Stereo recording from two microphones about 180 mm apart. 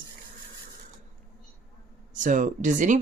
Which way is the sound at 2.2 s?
45° right (ahead or behind).